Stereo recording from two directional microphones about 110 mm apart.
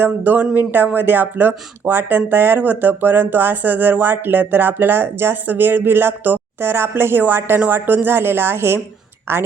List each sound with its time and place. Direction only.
0.0 s speech: 15° right (ahead or behind)